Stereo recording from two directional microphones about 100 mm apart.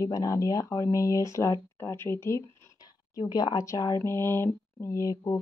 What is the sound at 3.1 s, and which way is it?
Speech, 40° left (ahead or behind).